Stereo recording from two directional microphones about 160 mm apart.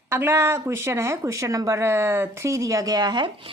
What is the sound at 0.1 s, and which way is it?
Speech, 15° right (ahead or behind).